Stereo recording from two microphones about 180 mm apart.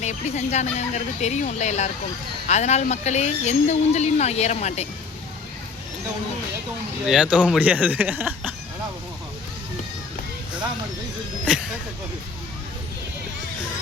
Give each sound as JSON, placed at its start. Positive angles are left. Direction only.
{"t": 0.0, "sound": "speech", "side_deg": 40}
{"t": 7.1, "sound": "speech", "side_deg": -5}